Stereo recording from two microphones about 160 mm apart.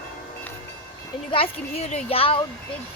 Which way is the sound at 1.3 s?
40° left (ahead or behind).